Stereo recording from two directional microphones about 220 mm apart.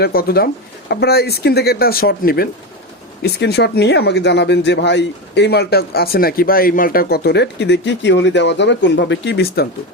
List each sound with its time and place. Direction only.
0.0 s speech: 45° left (ahead or behind)